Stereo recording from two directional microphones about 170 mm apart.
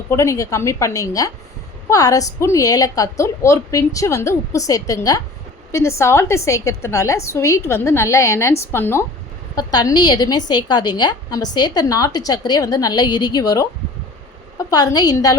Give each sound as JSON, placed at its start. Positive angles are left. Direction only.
{"t": 0.1, "sound": "a woman's voice", "side_deg": 15}
{"t": 14.7, "sound": "a woman's voice", "side_deg": 20}